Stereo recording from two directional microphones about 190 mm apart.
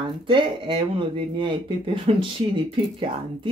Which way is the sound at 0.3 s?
25° right (ahead or behind).